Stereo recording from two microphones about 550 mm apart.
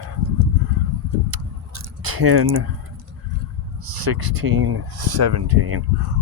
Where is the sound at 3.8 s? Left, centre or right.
Right.